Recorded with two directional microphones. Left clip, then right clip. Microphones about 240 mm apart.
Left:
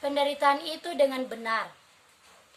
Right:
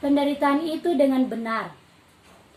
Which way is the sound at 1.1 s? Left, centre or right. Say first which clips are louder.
Right 5 dB; left.